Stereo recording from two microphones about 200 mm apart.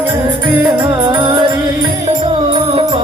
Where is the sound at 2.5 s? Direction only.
25° right (ahead or behind).